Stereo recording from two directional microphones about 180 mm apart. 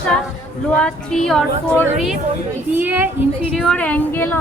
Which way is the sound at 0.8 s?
5° left (ahead or behind).